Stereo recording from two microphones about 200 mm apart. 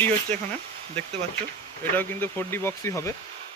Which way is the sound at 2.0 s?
10° left (ahead or behind).